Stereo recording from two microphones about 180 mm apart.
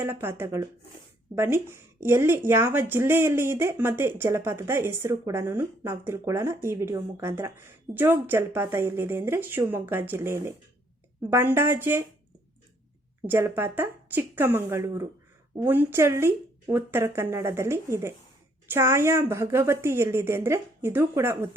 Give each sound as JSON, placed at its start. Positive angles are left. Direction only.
{"t": 0.0, "sound": "a woman's voice", "side_deg": -15}
{"t": 13.2, "sound": "a woman's voice", "side_deg": -10}
{"t": 14.8, "sound": "speech", "side_deg": -25}
{"t": 15.5, "sound": "a woman's voice", "side_deg": -10}